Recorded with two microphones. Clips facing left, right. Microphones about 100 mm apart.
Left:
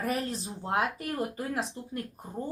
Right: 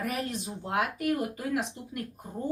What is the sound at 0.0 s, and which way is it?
A woman's voice, 35° left (ahead or behind).